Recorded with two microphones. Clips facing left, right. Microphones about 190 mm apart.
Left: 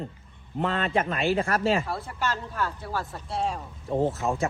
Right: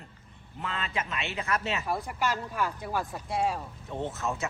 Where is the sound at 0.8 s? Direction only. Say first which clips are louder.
Left 5 dB; 55° left (ahead or behind).